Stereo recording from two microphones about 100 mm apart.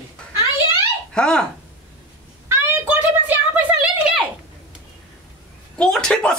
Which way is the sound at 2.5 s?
20° right (ahead or behind).